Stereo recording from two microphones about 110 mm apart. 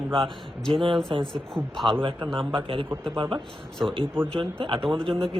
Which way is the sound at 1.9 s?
50° right (ahead or behind).